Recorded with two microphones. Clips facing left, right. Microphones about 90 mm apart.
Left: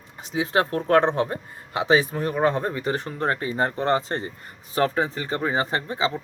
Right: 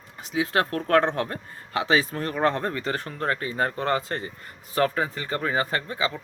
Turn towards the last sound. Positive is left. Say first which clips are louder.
# left 2 dB
turn(degrees=25)  # may be behind; listen again after turning